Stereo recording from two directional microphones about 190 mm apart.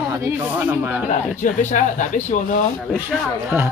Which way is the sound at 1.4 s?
40° left (ahead or behind).